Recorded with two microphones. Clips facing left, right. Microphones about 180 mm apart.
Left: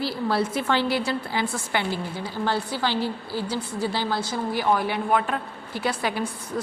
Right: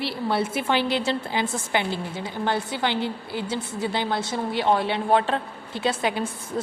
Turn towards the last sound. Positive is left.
turn(degrees=-20)  # may be behind; listen again after turning